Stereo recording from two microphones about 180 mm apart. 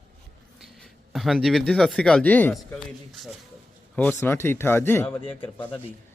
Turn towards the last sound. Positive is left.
turn(degrees=10)  # may be behind; listen again after turning